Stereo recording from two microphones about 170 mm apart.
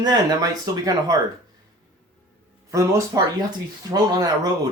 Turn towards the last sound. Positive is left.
turn(degrees=-20)  # may be behind; listen again after turning